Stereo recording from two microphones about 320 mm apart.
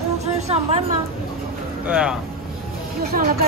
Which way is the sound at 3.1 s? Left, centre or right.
Right.